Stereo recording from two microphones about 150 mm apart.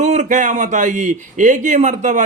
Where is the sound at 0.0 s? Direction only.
50° right (ahead or behind).